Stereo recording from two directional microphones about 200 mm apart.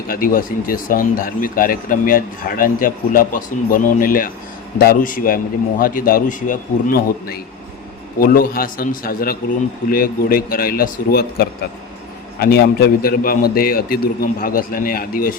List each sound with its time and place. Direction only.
0.1 s speech: 45° left (ahead or behind)